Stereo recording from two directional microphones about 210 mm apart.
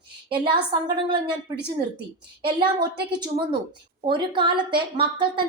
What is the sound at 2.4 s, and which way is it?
Speech, 25° right (ahead or behind).